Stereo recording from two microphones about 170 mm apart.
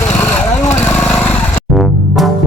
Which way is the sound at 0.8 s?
5° left (ahead or behind).